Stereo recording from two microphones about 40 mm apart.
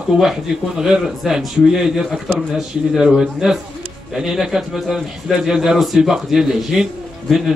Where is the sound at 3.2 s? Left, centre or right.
Centre.